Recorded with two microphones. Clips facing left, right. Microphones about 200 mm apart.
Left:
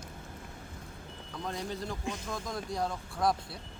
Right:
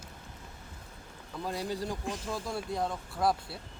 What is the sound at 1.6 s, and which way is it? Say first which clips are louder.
Speech: right 3 dB; 10° right (ahead or behind).